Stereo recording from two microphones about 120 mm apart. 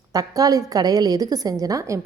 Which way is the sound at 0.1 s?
30° right (ahead or behind).